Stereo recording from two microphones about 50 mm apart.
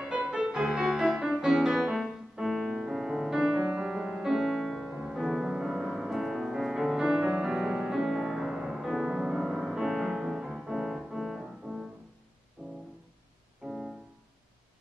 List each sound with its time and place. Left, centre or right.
0.0 s music: centre
1.8 s music: centre
3.3 s music: centre
3.6 s music: centre
4.9 s music: centre
5.2 s music: centre
7.2 s music: centre
9.9 s music: centre
10.4 s music: centre